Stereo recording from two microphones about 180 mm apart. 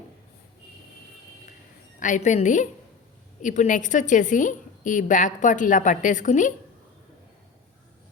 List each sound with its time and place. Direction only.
2.0 s a woman's voice: 45° left (ahead or behind)